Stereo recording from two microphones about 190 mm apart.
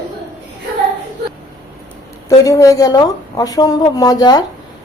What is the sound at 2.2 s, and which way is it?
A woman's voice, 15° left (ahead or behind).